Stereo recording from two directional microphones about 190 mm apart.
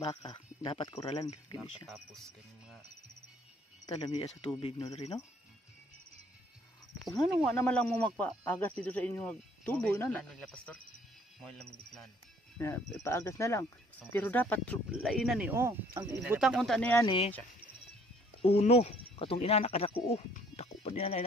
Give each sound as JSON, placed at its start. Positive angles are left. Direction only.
{"t": 0.0, "sound": "speech", "side_deg": 25}
{"t": 3.8, "sound": "speech", "side_deg": 25}
{"t": 7.4, "sound": "speech", "side_deg": 5}
{"t": 12.5, "sound": "speech", "side_deg": 15}
{"t": 16.3, "sound": "speech", "side_deg": -5}
{"t": 17.0, "sound": "speech", "side_deg": 25}
{"t": 18.4, "sound": "speech", "side_deg": 30}